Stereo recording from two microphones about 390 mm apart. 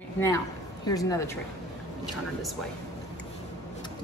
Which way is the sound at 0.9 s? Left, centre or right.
Centre.